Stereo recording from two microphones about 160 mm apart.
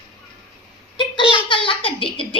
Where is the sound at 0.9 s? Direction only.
30° left (ahead or behind).